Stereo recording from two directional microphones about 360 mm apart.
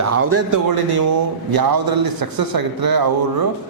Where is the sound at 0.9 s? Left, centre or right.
Right.